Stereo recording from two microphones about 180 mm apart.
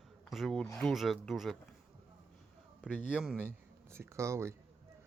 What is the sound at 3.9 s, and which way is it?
Speech, 15° right (ahead or behind).